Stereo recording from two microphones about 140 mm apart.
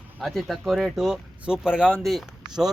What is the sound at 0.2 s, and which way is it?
Speech, centre (ahead or behind).